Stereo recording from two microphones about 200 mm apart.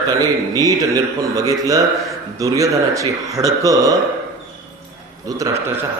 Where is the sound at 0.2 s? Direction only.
20° right (ahead or behind).